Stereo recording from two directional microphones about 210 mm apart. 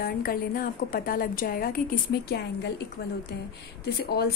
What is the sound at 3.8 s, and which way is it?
Speech, 50° left (ahead or behind).